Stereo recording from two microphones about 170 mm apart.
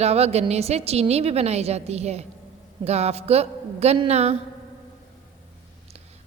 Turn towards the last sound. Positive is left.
turn(degrees=-40)  # may be behind; listen again after turning